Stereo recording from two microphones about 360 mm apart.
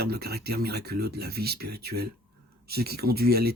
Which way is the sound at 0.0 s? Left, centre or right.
Right.